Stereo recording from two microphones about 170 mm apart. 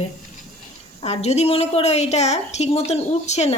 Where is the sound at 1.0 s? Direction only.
40° left (ahead or behind).